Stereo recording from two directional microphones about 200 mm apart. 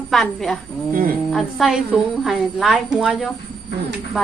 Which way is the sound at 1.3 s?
Centre (ahead or behind).